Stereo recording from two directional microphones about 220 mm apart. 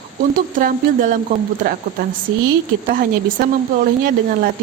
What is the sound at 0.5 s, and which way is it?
Speech, 35° right (ahead or behind).